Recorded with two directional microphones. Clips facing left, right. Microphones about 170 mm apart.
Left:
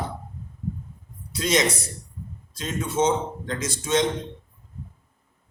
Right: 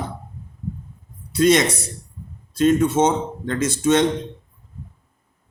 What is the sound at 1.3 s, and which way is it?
Speech, 60° right (ahead or behind).